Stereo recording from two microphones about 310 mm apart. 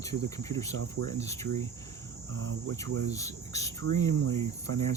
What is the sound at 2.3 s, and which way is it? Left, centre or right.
Cricket, right.